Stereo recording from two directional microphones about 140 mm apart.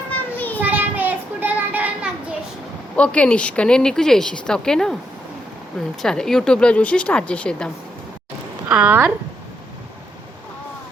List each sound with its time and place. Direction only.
0.1 s children playing: 10° left (ahead or behind)
0.6 s child singing: 10° right (ahead or behind)
2.9 s a woman's voice: 10° left (ahead or behind)
6.0 s speech: 5° left (ahead or behind)
8.7 s speech: 10° right (ahead or behind)